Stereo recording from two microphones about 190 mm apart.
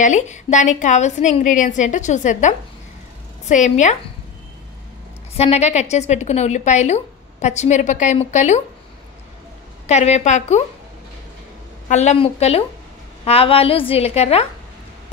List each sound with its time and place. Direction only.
0.0 s a woman's voice: 40° left (ahead or behind)
5.3 s a woman's voice: 35° left (ahead or behind)
9.8 s a woman's voice: 35° left (ahead or behind)
11.9 s a woman's voice: 35° left (ahead or behind)